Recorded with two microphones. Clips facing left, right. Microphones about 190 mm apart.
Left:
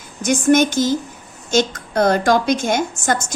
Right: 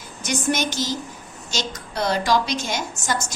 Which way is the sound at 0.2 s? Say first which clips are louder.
Left 9 dB; 50° left (ahead or behind).